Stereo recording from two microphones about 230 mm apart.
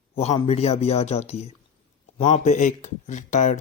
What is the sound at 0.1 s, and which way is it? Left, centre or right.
A man's voice, left.